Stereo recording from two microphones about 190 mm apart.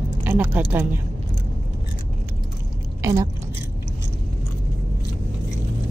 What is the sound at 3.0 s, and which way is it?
Speech, 15° right (ahead or behind).